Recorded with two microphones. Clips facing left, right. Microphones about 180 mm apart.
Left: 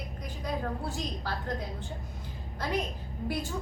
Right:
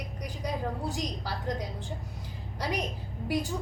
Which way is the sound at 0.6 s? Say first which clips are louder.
Right 1 dB; 15° right (ahead or behind).